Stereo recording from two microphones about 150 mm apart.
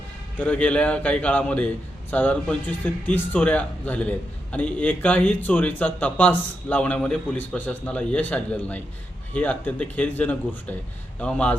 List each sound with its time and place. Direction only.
0.3 s speech: 10° left (ahead or behind)